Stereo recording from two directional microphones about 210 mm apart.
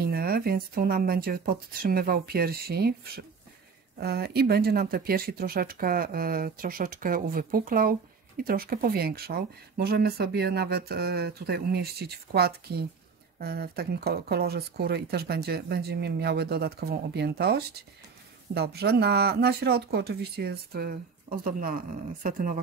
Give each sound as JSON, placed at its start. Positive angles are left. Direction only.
{"t": 0.0, "sound": "speech", "side_deg": -45}